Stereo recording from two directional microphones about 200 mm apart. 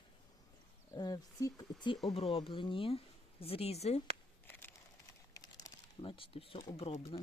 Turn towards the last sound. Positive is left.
turn(degrees=30)  # may be behind; listen again after turning